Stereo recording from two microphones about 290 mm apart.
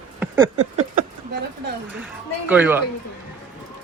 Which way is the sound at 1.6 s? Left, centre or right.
Right.